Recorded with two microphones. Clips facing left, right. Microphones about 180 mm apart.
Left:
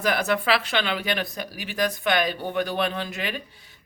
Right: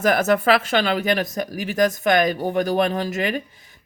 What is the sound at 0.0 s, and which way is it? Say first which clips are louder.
Speech: right 6 dB; 45° right (ahead or behind).